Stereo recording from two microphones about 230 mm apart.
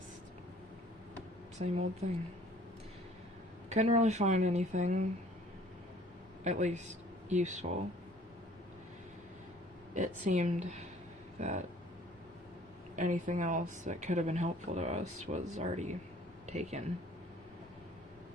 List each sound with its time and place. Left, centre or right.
1.5 s speech: right
3.7 s speech: right
6.4 s speech: right
9.9 s speech: right
13.0 s speech: right